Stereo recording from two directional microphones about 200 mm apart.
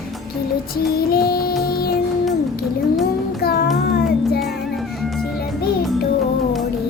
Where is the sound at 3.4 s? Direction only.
50° left (ahead or behind).